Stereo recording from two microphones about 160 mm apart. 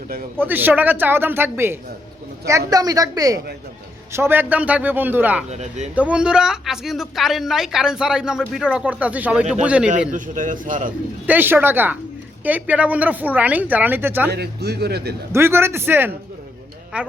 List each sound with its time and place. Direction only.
0.3 s a woman's voice: 10° right (ahead or behind)
5.5 s speech: 45° right (ahead or behind)
5.9 s a woman's voice: 10° right (ahead or behind)
10.1 s a man's voice: 55° right (ahead or behind)
11.3 s a woman's voice: 10° right (ahead or behind)
14.3 s a man's voice: 90° right
15.3 s a woman's voice: 15° right (ahead or behind)